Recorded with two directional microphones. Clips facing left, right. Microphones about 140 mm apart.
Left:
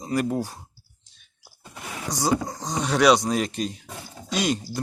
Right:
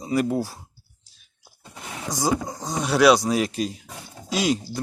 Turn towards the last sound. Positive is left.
turn(degrees=-5)  # may be behind; listen again after turning